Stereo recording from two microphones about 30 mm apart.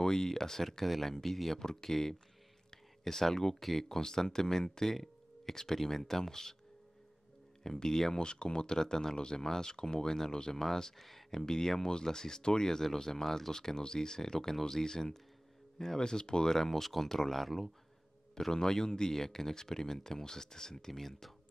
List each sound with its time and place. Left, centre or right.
0.0 s speech: left
1.6 s speech: centre
7.6 s speech: left
8.2 s speech: left; by 11.0 s centre
11.0 s speech: centre
11.2 s speech: centre
16.5 s speech: centre
18.5 s speech: left